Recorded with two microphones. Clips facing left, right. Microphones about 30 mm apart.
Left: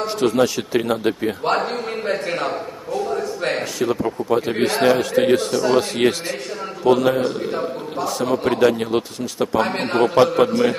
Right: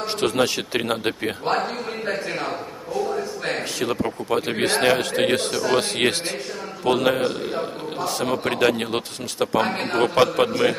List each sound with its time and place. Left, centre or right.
0.0 s speech: right
4.3 s a man's voice: right
8.2 s a man's voice: right
8.5 s speech: right
10.0 s speech: right